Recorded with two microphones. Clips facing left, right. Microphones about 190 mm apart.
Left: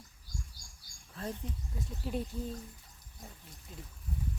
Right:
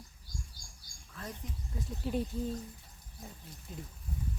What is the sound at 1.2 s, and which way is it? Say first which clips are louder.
Speech: left 5 dB; 30° left (ahead or behind).